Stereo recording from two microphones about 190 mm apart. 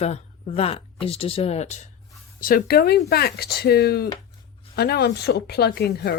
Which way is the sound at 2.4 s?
50° left (ahead or behind).